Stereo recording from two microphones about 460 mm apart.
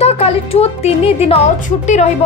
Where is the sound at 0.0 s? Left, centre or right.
Centre.